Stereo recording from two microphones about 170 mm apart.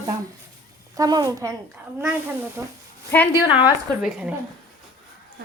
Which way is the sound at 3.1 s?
10° left (ahead or behind).